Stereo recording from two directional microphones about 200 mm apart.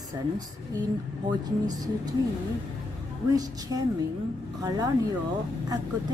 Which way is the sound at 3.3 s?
20° right (ahead or behind).